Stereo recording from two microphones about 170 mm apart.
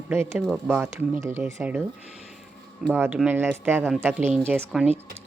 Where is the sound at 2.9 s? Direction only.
5° right (ahead or behind).